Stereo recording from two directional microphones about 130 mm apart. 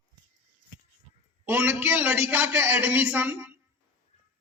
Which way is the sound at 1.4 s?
15° right (ahead or behind).